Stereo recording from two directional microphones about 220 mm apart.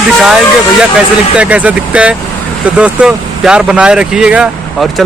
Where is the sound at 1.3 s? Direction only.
5° right (ahead or behind).